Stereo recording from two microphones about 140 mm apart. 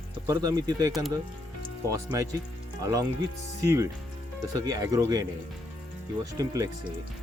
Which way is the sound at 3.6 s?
20° right (ahead or behind).